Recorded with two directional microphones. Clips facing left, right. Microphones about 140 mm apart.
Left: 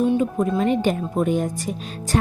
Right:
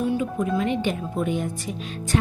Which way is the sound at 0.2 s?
35° left (ahead or behind).